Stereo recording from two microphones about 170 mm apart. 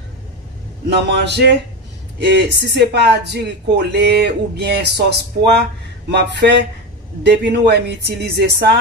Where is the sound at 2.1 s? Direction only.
90° right.